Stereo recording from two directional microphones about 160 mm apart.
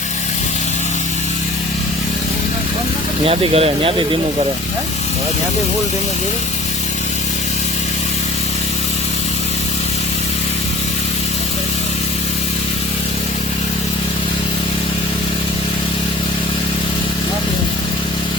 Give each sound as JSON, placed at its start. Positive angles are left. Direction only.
{"t": 3.2, "sound": "speech", "side_deg": -35}